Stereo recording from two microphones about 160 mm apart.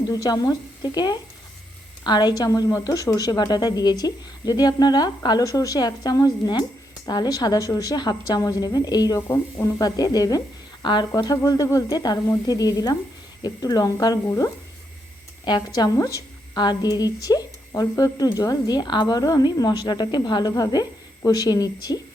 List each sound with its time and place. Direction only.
0.1 s a woman's voice: 25° left (ahead or behind)